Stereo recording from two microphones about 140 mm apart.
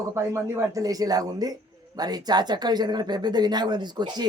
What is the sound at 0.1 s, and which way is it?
A man's voice, 20° right (ahead or behind).